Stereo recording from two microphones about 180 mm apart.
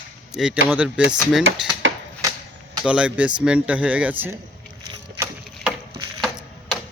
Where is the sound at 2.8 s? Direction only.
5° right (ahead or behind).